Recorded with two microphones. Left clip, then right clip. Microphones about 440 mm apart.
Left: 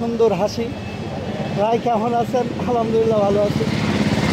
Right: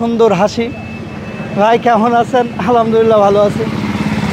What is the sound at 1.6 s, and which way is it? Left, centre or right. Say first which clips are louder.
Speech: right 9 dB; right.